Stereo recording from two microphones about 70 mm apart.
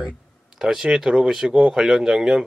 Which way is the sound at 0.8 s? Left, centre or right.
Centre.